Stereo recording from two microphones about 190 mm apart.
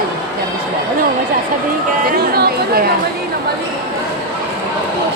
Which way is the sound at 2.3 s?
55° right (ahead or behind).